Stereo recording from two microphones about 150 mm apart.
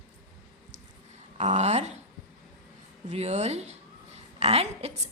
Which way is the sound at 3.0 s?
45° right (ahead or behind).